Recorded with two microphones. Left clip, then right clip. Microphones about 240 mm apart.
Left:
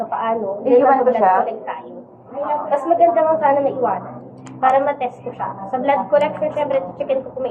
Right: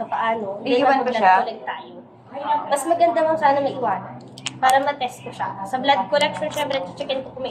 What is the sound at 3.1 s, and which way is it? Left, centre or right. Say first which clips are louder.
Speech: left 3 dB; right.